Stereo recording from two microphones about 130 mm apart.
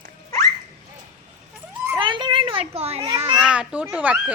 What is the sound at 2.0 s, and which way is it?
A child's voice, 40° right (ahead or behind).